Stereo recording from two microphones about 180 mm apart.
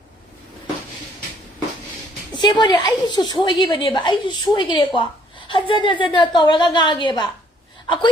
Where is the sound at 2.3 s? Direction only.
25° left (ahead or behind).